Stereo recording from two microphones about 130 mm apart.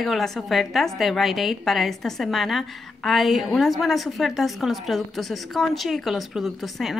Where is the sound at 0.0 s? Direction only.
Centre (ahead or behind).